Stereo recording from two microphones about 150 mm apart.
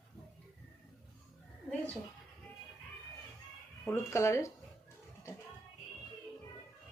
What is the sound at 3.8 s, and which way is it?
Speech, 20° left (ahead or behind).